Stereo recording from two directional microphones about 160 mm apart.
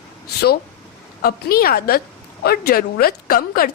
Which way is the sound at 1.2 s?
70° left (ahead or behind).